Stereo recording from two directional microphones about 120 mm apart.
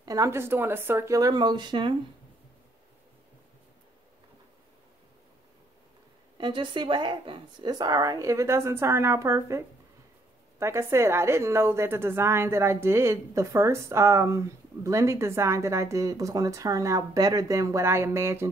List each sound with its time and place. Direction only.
0.0 s a woman's voice: 30° right (ahead or behind)
6.3 s a woman's voice: 40° right (ahead or behind); by 9.6 s 25° right (ahead or behind)
10.6 s a woman's voice: 20° right (ahead or behind)